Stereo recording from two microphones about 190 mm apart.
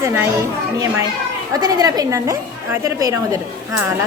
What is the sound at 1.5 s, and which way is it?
A woman's voice, 20° right (ahead or behind).